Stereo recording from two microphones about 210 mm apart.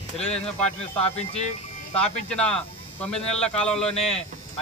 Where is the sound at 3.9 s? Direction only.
30° left (ahead or behind).